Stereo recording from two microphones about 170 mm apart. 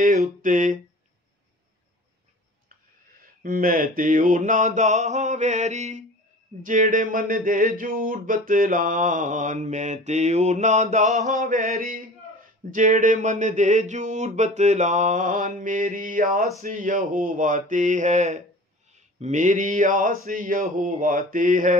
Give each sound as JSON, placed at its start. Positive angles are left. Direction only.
{"t": 0.4, "sound": "speech", "side_deg": -50}
{"t": 3.1, "sound": "speech", "side_deg": -55}